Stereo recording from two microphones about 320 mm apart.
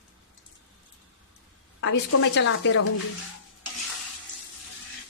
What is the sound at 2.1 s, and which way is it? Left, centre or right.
Speech, left.